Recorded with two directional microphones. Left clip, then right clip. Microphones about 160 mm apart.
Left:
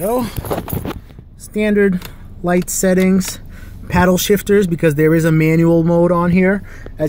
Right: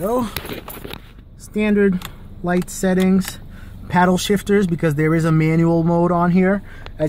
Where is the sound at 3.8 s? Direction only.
10° left (ahead or behind).